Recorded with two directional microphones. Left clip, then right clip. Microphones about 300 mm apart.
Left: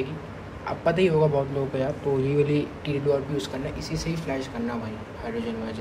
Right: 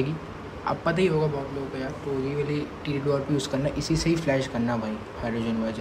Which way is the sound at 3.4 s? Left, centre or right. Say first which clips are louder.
Right 3 dB; centre.